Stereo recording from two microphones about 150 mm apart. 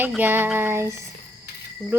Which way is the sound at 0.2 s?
15° right (ahead or behind).